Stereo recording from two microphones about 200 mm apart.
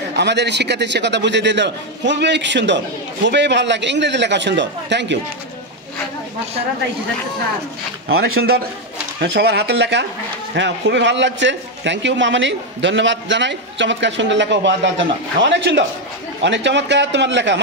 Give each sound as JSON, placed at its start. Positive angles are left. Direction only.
{"t": 0.1, "sound": "a man's voice", "side_deg": -60}
{"t": 9.2, "sound": "a man's voice", "side_deg": -55}